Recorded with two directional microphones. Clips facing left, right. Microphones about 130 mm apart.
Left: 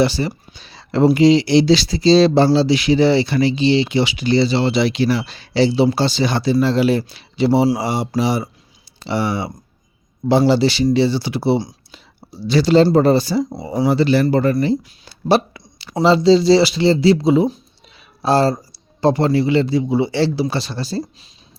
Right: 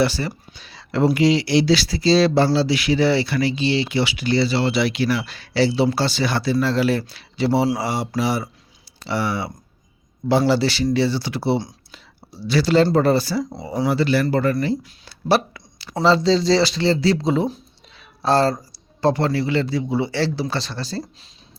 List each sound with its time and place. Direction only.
0.0 s speech: 20° left (ahead or behind)
0.6 s a man's voice: 30° left (ahead or behind); by 21.1 s 15° left (ahead or behind)